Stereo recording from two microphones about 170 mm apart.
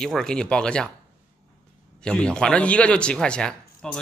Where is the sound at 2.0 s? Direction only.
5° left (ahead or behind).